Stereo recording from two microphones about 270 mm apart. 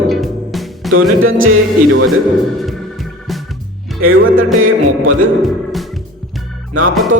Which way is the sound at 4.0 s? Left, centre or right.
Right.